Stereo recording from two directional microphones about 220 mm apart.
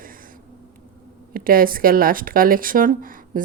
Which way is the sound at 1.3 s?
40° right (ahead or behind).